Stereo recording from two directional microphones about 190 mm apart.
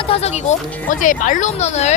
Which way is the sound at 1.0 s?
40° left (ahead or behind).